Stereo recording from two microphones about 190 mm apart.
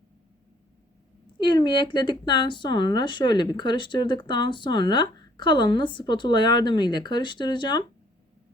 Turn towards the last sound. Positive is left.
turn(degrees=25)  # may be behind; listen again after turning